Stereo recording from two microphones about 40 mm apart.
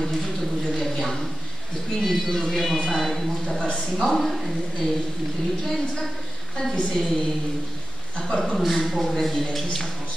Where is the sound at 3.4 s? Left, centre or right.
Left.